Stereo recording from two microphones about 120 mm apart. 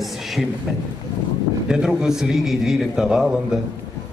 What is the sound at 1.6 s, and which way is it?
A man's voice, 5° right (ahead or behind).